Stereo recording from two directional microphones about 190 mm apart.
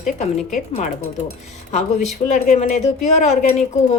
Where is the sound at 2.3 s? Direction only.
40° left (ahead or behind).